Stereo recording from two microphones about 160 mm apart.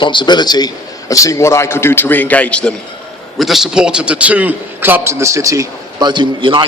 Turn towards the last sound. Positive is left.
turn(degrees=-30)  # may be behind; listen again after turning